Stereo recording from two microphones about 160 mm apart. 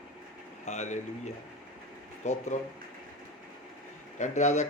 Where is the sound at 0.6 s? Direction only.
45° left (ahead or behind).